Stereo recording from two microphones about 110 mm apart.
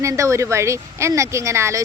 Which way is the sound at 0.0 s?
30° right (ahead or behind).